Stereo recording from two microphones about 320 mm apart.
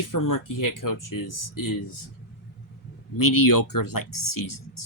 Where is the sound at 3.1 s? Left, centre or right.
Left.